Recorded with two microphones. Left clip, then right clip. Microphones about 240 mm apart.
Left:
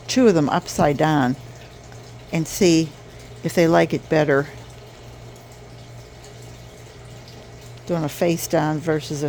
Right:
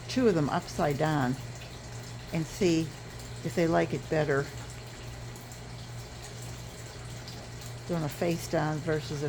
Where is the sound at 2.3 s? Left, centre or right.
Left.